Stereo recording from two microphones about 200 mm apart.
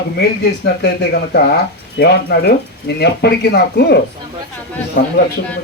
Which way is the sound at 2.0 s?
55° left (ahead or behind).